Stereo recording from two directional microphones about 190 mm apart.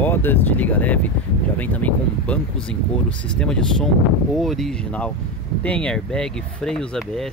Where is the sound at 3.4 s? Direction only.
5° left (ahead or behind).